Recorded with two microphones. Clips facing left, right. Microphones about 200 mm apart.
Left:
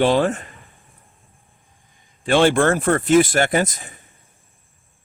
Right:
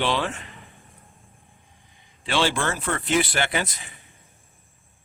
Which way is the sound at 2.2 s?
50° left (ahead or behind).